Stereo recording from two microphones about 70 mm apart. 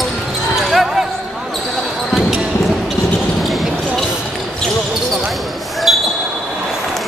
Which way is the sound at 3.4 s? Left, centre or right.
Centre.